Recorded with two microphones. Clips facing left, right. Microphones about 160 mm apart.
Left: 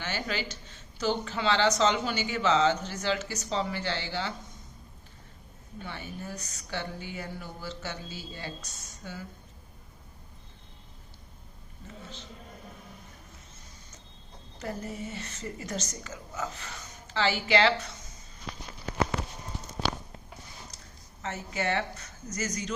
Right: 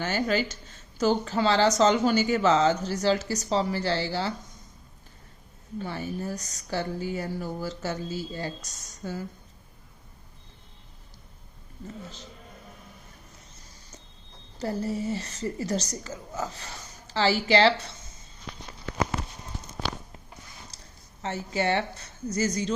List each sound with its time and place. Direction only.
0.0 s speech: 45° right (ahead or behind)
5.8 s speech: 40° right (ahead or behind)
14.6 s speech: 35° right (ahead or behind)
20.7 s a sound: 35° right (ahead or behind)
21.2 s speech: 30° right (ahead or behind)